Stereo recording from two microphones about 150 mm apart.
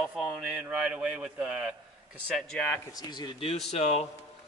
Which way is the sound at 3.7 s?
45° left (ahead or behind).